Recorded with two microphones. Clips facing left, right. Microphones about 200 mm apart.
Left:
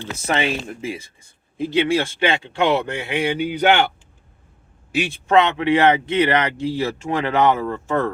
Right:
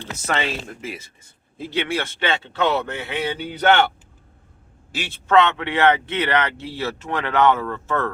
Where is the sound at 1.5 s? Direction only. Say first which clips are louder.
Left 6 dB; 15° left (ahead or behind).